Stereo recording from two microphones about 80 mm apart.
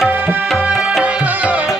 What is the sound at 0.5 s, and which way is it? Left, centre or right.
Tabla, centre.